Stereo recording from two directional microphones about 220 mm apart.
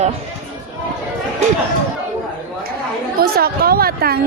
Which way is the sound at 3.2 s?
45° right (ahead or behind).